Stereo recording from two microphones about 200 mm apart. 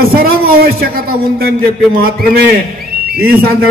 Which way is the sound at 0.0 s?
50° right (ahead or behind).